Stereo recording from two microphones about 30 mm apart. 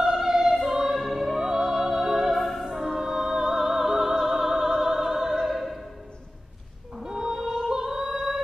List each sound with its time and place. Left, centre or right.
0.1 s music: centre
2.4 s music: centre
3.0 s music: centre
5.4 s opera: centre
7.0 s whale vocalization: right
7.7 s female singing: centre